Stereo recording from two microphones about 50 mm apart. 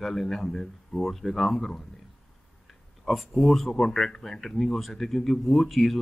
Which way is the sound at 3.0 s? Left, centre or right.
Centre.